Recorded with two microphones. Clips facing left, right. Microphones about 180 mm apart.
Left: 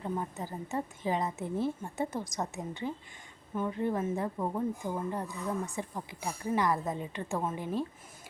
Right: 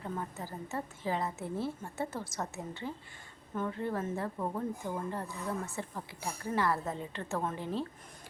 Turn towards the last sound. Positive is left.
turn(degrees=10)  # may be behind; listen again after turning